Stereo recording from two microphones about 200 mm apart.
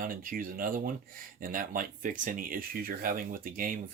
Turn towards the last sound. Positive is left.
turn(degrees=-45)  # may be behind; listen again after turning